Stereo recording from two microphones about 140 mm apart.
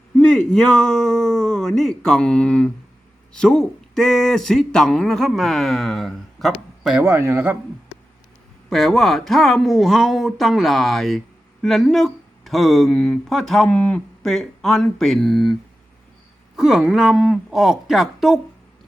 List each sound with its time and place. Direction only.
0.2 s speech: 5° left (ahead or behind)
7.0 s speech: 15° right (ahead or behind)
8.7 s speech: centre (ahead or behind)
16.6 s speech: 5° right (ahead or behind)